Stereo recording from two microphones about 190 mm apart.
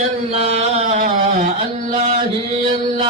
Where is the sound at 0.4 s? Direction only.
35° right (ahead or behind).